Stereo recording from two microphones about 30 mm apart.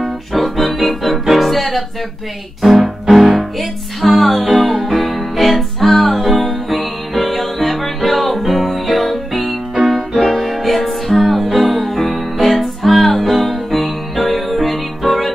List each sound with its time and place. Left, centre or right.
0.0 s music: centre